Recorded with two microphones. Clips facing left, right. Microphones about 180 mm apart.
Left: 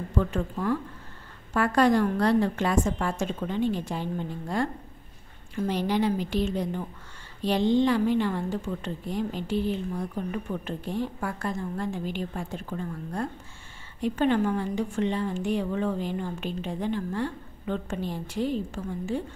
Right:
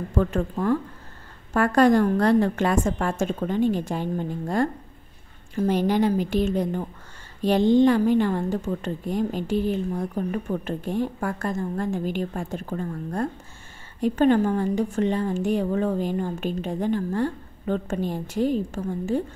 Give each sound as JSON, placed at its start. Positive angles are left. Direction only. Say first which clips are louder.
{"t": 0.1, "sound": "a woman's voice", "louder": "right 4 dB", "side_deg": -50}